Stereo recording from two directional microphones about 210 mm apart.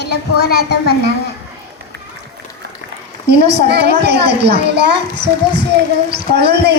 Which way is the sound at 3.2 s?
50° right (ahead or behind).